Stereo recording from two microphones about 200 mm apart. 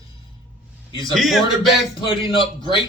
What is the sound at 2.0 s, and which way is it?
Speech, 25° left (ahead or behind).